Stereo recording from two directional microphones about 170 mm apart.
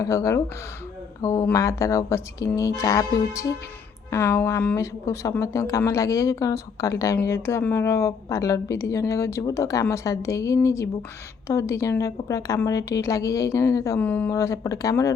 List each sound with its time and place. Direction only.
0.0 s a woman's voice: 20° left (ahead or behind)